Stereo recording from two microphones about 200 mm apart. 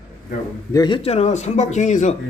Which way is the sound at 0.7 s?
20° left (ahead or behind).